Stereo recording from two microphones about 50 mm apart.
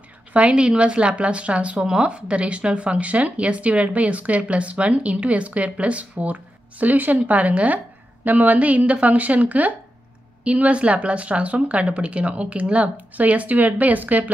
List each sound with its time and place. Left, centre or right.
0.3 s a woman's voice: right